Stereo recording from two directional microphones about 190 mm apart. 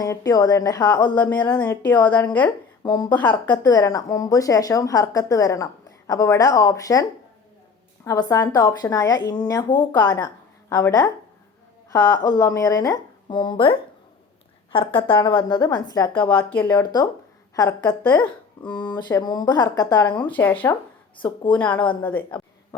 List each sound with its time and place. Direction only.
0.0 s speech: 20° left (ahead or behind)
1.1 s speech: 10° left (ahead or behind)
1.8 s speech: 20° left (ahead or behind)
3.1 s speech: 10° left (ahead or behind)
8.0 s speech: 20° left (ahead or behind)
15.1 s speech: 15° left (ahead or behind)
16.8 s speech: 20° left (ahead or behind); by 18.9 s 5° left (ahead or behind)
18.9 s speech: 20° left (ahead or behind)
21.2 s speech: 25° left (ahead or behind)
21.5 s speech: 5° left (ahead or behind)